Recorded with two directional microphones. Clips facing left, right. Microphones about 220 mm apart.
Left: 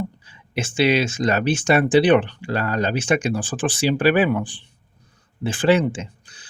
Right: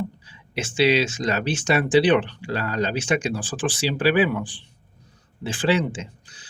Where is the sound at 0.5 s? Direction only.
50° left (ahead or behind).